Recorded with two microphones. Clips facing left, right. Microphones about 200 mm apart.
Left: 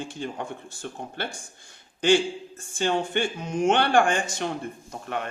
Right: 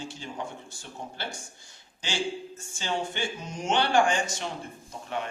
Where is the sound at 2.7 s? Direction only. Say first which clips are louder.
Left 7 dB; 55° left (ahead or behind).